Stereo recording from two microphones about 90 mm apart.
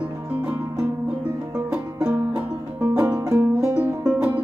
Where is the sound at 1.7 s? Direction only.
15° right (ahead or behind).